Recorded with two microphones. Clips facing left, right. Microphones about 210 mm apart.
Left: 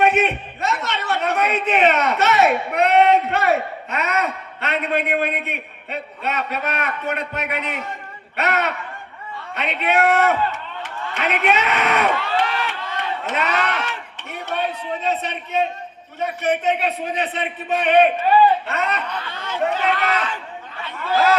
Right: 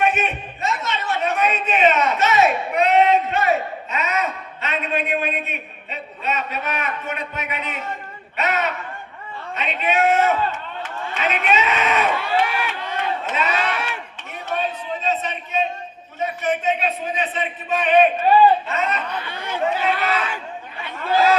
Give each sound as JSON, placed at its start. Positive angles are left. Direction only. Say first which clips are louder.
{"t": 0.0, "sound": "a sound", "louder": "left 4 dB", "side_deg": 70}
{"t": 8.4, "sound": "a man's voice", "louder": "left 1 dB", "side_deg": 65}
{"t": 12.3, "sound": "chop", "louder": "right 1 dB", "side_deg": -10}
{"t": 13.2, "sound": "a man's voice", "louder": "left 1 dB", "side_deg": 65}
{"t": 13.7, "sound": "speech", "louder": "even", "side_deg": -10}
{"t": 14.2, "sound": "a sound", "louder": "left 1 dB", "side_deg": 65}
{"t": 16.2, "sound": "a man's voice", "louder": "left 1 dB", "side_deg": 65}
{"t": 19.2, "sound": "speech", "louder": "left 1 dB", "side_deg": -15}